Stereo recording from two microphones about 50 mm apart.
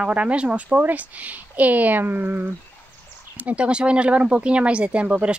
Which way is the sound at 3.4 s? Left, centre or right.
Right.